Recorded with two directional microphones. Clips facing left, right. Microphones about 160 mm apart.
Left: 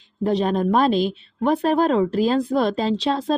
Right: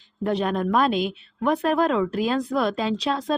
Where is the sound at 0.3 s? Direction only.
25° left (ahead or behind).